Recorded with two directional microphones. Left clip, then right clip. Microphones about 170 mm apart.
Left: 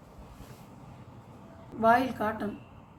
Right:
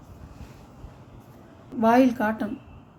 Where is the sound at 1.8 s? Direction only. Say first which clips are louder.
Right 4 dB; 55° right (ahead or behind).